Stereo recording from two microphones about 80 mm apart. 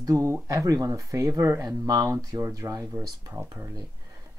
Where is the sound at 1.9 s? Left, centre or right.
Right.